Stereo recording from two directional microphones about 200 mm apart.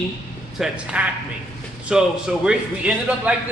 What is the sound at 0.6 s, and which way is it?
A man's voice, 5° right (ahead or behind).